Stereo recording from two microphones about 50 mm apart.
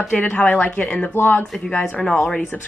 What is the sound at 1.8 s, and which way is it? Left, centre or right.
Speech, centre.